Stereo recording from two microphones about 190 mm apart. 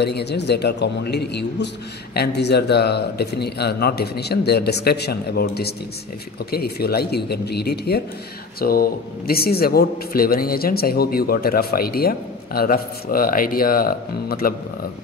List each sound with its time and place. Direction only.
0.0 s speech: 60° left (ahead or behind)